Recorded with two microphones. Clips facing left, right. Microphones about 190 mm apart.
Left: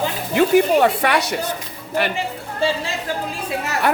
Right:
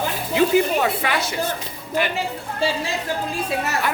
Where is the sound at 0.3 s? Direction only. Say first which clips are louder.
Left 3 dB; 70° left (ahead or behind).